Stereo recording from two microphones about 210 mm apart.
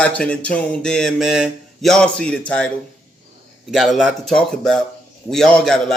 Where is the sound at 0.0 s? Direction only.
5° left (ahead or behind).